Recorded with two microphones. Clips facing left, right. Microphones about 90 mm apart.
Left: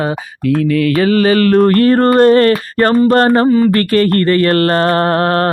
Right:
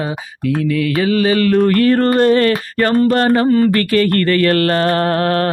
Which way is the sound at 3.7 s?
40° left (ahead or behind).